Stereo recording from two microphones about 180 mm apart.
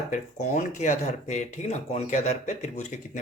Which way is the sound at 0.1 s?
40° left (ahead or behind).